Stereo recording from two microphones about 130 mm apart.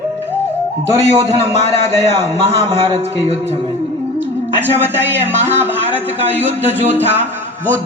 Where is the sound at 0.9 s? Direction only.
25° right (ahead or behind).